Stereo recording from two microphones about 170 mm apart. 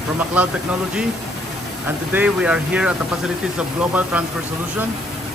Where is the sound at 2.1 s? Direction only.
5° right (ahead or behind).